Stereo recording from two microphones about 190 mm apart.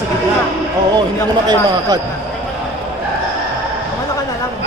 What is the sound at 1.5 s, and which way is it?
Speech, 20° right (ahead or behind).